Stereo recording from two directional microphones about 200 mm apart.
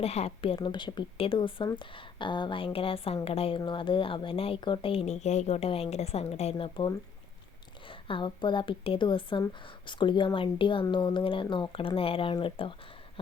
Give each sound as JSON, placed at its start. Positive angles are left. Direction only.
{"t": 0.0, "sound": "a woman's voice", "side_deg": 30}